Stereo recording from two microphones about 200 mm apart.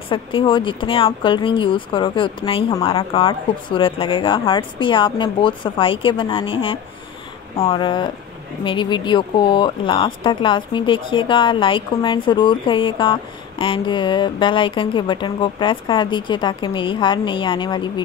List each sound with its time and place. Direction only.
0.1 s speech: 25° left (ahead or behind)